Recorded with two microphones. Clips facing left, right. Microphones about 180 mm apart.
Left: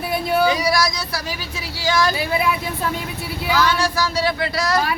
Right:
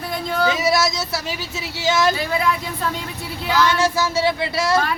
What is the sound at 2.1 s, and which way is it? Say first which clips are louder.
Speech: even; 10° left (ahead or behind).